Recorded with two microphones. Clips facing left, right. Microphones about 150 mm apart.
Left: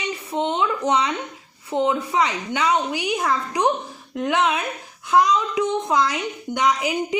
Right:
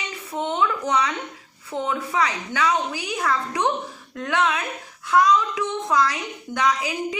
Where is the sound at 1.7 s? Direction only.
20° left (ahead or behind).